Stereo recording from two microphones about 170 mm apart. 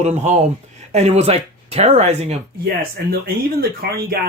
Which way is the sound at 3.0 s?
60° right (ahead or behind).